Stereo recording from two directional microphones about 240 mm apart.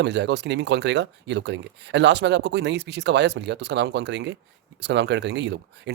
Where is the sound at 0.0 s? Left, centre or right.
Right.